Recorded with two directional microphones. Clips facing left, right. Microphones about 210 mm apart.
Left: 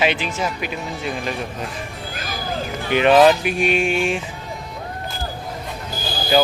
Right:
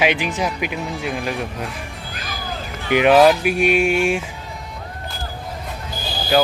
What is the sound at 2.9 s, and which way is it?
Speech, 10° right (ahead or behind).